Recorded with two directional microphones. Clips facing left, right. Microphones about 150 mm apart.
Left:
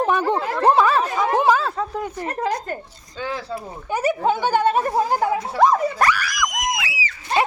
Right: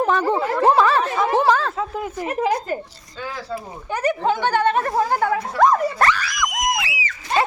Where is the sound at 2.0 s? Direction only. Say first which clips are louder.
Right 2 dB; 5° right (ahead or behind).